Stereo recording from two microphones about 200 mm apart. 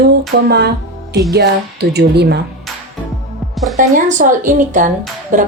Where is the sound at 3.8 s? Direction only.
40° right (ahead or behind).